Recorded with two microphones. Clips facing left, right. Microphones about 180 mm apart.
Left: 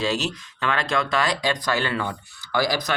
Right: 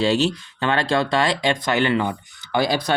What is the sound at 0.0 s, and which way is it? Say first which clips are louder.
Speech: right 6 dB; 30° right (ahead or behind).